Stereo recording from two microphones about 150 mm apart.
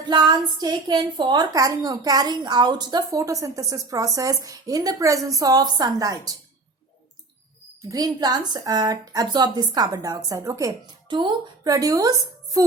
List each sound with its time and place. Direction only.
0.0 s a woman's voice: 30° right (ahead or behind)
7.9 s a woman's voice: 25° right (ahead or behind)